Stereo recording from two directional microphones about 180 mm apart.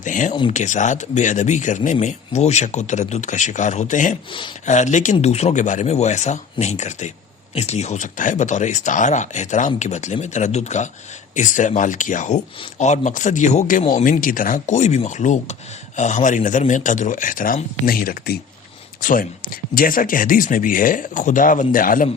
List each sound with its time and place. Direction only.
0.0 s speech: 45° left (ahead or behind)
4.3 s speech: 25° left (ahead or behind)
4.6 s speech: 40° left (ahead or behind)